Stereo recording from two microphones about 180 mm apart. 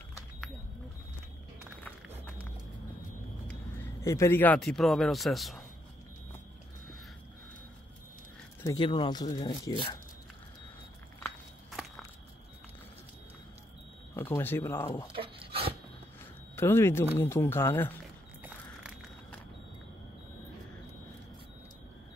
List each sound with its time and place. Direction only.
4.0 s speech: 15° left (ahead or behind); by 5.6 s centre (ahead or behind)
8.6 s speech: 25° left (ahead or behind)
14.1 s speech: 10° left (ahead or behind)
15.1 s dog: 30° right (ahead or behind)
16.5 s speech: 15° left (ahead or behind)